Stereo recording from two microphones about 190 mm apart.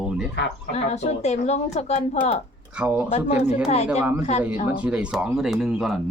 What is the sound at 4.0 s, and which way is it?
Speech, 15° right (ahead or behind).